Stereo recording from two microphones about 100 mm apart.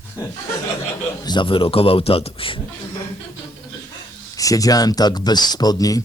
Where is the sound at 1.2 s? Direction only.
50° left (ahead or behind); by 2.6 s 65° left (ahead or behind).